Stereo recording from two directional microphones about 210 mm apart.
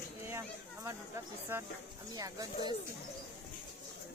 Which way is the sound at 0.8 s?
15° right (ahead or behind).